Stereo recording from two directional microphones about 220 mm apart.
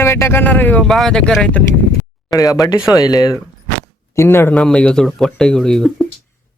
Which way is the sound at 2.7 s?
15° left (ahead or behind).